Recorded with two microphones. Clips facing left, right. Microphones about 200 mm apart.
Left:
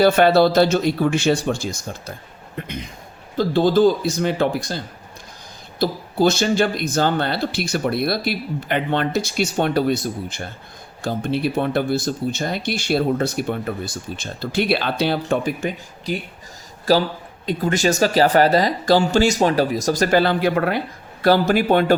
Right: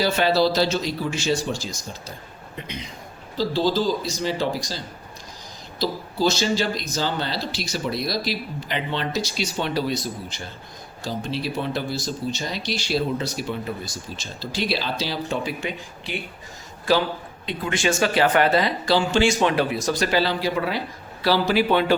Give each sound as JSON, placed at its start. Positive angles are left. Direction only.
{"t": 0.0, "sound": "speech", "side_deg": 55}
{"t": 5.8, "sound": "a man's voice", "side_deg": 55}